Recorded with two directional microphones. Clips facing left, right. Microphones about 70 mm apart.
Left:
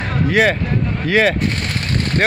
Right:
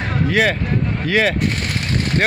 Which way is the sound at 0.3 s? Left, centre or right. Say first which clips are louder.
Left 3 dB; left.